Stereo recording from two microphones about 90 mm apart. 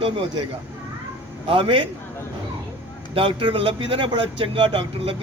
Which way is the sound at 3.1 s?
85° right.